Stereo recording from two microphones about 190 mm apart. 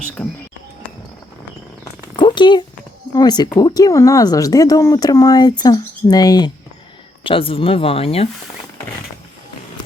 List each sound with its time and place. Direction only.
0.2 s music: 5° left (ahead or behind)
2.1 s a sound: 25° left (ahead or behind)
3.2 s speech: 20° left (ahead or behind)